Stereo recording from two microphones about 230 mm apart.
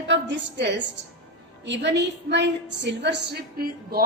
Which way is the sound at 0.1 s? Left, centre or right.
Right.